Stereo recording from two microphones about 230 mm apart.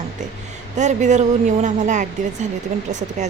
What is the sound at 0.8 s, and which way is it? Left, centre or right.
Speech, right.